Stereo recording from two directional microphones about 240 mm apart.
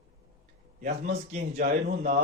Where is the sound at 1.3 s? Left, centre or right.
Right.